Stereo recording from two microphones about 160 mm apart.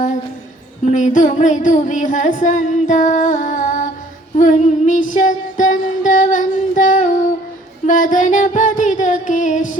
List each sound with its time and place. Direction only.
0.9 s music: 50° left (ahead or behind)
4.4 s female singing: 50° left (ahead or behind)
7.9 s music: 55° left (ahead or behind)